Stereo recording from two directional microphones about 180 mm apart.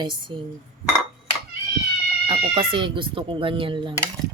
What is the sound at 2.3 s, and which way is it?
Speech, 30° right (ahead or behind).